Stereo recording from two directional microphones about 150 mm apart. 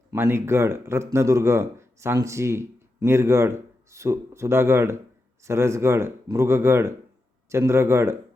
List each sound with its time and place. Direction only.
0.1 s speech: 15° right (ahead or behind)